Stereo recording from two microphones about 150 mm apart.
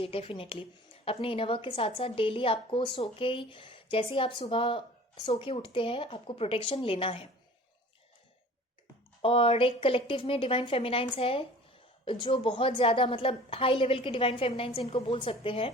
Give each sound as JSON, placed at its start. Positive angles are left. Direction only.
{"t": 0.0, "sound": "speech", "side_deg": 40}
{"t": 9.2, "sound": "speech", "side_deg": 40}